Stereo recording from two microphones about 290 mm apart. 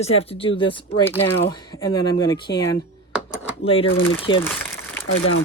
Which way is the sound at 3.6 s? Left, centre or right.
Centre.